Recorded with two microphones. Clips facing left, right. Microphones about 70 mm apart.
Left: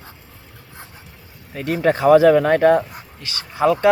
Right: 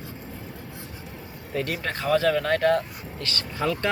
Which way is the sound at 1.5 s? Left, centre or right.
Centre.